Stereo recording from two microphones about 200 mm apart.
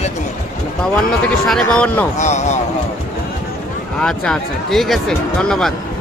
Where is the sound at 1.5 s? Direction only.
5° left (ahead or behind).